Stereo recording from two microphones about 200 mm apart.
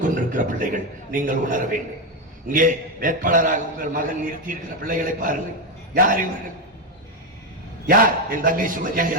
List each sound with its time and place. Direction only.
0.0 s a man's voice: 40° right (ahead or behind)
7.9 s a man's voice: 45° right (ahead or behind)